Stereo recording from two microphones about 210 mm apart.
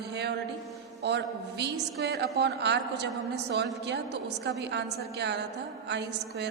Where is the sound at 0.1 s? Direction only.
50° right (ahead or behind).